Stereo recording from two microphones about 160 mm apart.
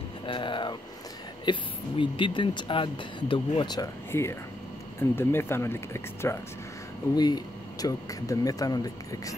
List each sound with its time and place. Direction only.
0.3 s speech: 30° left (ahead or behind)